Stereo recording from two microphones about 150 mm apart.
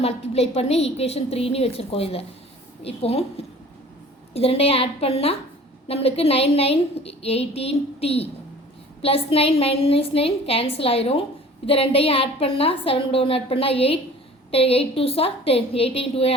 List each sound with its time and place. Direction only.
0.0 s a woman's voice: 45° left (ahead or behind)